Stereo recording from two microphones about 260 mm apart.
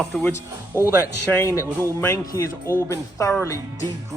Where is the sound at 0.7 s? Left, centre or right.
Centre.